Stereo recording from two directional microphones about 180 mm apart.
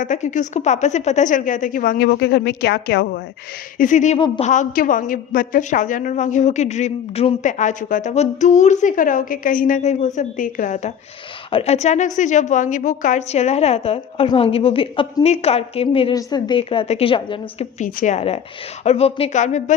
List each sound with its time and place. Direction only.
0.0 s a woman's voice: 45° left (ahead or behind); by 3.1 s 65° left (ahead or behind)
3.8 s a woman's voice: 45° left (ahead or behind)